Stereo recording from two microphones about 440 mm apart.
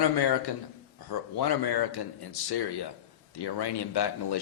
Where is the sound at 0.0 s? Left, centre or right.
Left.